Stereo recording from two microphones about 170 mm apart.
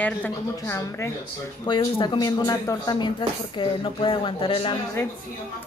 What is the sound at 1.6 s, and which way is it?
Speech, 30° left (ahead or behind).